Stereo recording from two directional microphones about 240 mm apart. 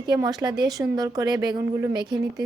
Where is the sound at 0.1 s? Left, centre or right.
Centre.